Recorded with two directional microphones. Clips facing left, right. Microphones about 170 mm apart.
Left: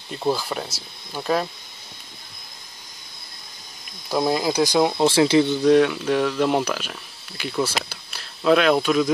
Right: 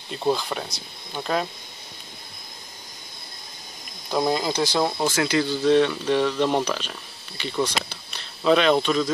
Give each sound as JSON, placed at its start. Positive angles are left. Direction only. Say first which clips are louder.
{"t": 0.2, "sound": "speech", "louder": "even", "side_deg": 5}
{"t": 4.1, "sound": "speech", "louder": "left 2 dB", "side_deg": 5}
{"t": 5.0, "sound": "speech", "louder": "left 6 dB", "side_deg": 30}
{"t": 5.7, "sound": "speech", "louder": "even", "side_deg": 5}